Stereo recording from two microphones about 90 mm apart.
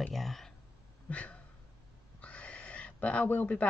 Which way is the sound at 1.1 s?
15° left (ahead or behind).